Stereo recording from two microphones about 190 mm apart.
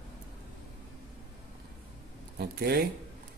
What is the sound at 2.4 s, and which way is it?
Speech, 55° right (ahead or behind).